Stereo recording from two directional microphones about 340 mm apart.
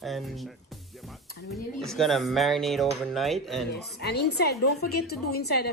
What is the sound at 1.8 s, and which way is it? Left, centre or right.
Speech, centre.